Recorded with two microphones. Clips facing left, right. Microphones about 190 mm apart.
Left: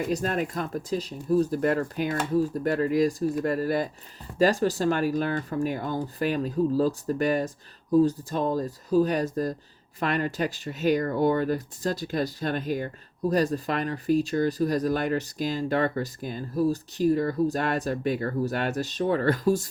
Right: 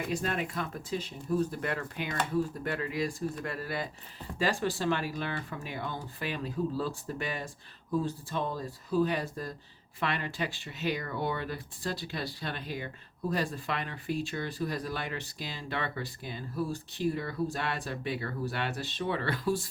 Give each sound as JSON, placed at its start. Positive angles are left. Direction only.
{"t": 0.1, "sound": "speech", "side_deg": 40}